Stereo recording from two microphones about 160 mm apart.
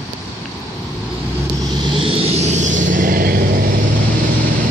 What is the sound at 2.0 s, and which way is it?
Vehicle, 35° right (ahead or behind).